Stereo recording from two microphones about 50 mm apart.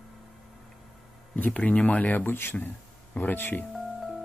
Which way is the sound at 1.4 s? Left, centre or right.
Left.